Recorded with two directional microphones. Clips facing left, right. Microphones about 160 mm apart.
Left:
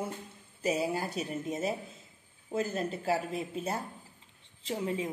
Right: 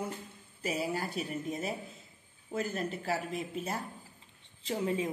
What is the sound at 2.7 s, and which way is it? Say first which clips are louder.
A woman's voice: left 3 dB; 30° left (ahead or behind).